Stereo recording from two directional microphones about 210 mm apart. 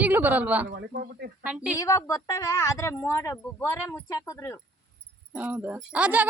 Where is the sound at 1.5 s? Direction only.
5° right (ahead or behind).